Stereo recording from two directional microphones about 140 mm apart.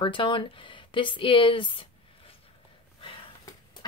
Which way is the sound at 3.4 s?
30° left (ahead or behind).